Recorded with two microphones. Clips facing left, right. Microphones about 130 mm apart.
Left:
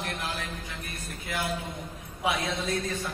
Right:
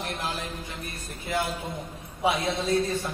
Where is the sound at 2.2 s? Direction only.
30° right (ahead or behind).